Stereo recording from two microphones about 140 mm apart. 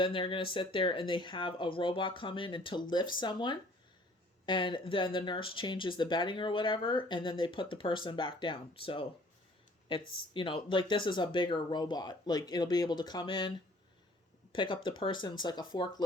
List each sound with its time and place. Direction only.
0.0 s speech: 40° left (ahead or behind)
10.3 s speech: 35° left (ahead or behind)
14.5 s speech: 35° left (ahead or behind)